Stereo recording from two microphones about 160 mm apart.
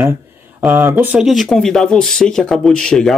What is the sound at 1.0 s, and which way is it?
Speech, 5° right (ahead or behind).